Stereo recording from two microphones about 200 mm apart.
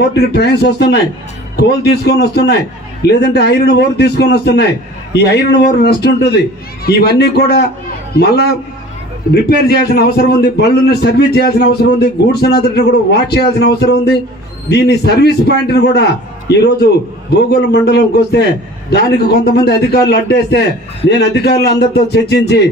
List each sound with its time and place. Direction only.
0.0 s a man's voice: 55° left (ahead or behind)